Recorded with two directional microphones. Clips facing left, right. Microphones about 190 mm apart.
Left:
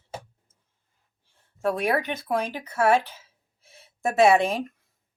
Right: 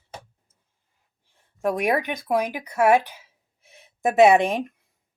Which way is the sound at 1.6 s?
15° right (ahead or behind).